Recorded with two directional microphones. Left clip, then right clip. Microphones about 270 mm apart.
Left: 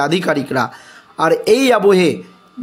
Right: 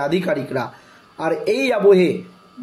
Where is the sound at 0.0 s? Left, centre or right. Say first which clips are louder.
Left 4 dB; left.